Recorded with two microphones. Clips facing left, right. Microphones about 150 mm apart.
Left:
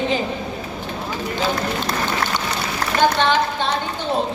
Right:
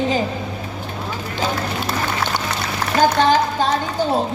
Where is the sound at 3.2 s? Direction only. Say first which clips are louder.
Right 3 dB; 40° right (ahead or behind).